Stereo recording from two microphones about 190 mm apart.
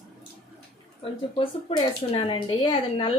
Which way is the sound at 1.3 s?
30° left (ahead or behind).